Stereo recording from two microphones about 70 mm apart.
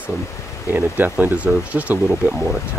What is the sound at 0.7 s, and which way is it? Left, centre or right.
Speech, right.